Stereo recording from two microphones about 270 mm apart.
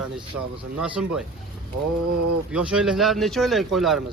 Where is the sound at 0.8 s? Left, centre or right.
Centre.